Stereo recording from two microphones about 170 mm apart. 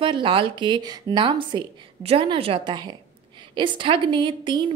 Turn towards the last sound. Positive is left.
turn(degrees=-30)  # may be behind; listen again after turning